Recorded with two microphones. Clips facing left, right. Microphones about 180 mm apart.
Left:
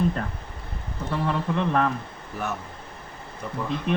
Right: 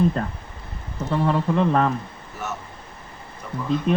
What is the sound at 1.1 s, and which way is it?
Speech, 35° right (ahead or behind).